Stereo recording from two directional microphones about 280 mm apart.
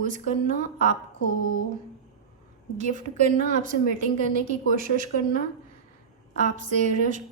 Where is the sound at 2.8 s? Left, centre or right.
Right.